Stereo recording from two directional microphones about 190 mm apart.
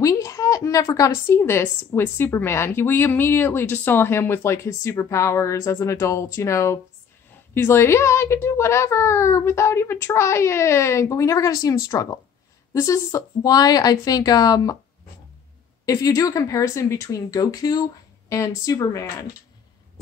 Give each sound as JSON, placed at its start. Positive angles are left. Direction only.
{"t": 0.0, "sound": "a woman's voice", "side_deg": 15}
{"t": 15.8, "sound": "a woman's voice", "side_deg": 20}